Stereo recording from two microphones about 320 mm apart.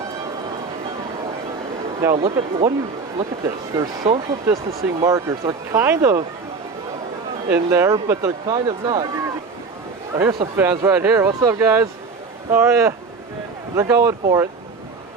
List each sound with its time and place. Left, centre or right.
2.1 s speech: centre
3.8 s speech: centre
7.5 s speech: centre
10.2 s speech: centre